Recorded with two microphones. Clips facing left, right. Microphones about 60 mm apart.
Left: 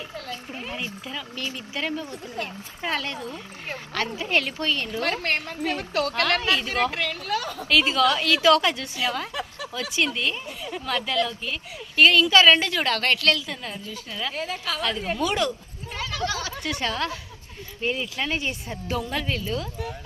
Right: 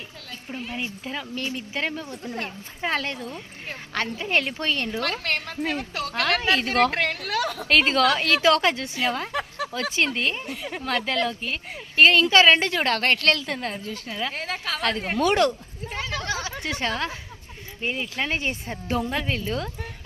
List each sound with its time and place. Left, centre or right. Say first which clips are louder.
1.0 s a woman's voice: right 2 dB; right
4.9 s a woman's voice: left 1 dB; left
6.2 s a woman's voice: even; centre
6.5 s a woman's voice: right 3 dB; right
7.7 s a woman's voice: even; right
9.3 s a sound: right 4 dB; right
9.9 s a woman's voice: left 1 dB; right
10.5 s a woman's voice: right 1 dB; right
15.9 s a sound: left 1 dB; right
17.7 s speech: left 1 dB; right